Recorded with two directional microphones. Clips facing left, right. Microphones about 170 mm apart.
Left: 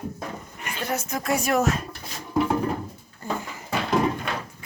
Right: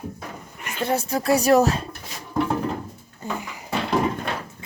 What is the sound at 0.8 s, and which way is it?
Speech, 30° right (ahead or behind).